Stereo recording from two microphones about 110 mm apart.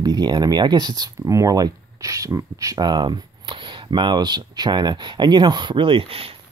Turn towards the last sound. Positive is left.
turn(degrees=-55)  # may be behind; listen again after turning